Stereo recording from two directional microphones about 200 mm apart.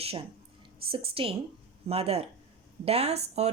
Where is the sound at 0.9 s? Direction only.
30° right (ahead or behind).